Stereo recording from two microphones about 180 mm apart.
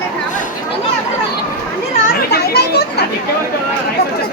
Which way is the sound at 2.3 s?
60° left (ahead or behind).